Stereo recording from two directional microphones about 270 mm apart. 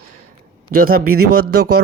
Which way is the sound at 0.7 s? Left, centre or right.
Right.